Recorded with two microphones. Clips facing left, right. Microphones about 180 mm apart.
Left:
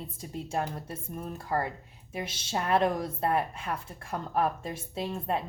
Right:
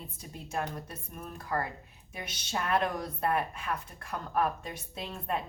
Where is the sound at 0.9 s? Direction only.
25° left (ahead or behind).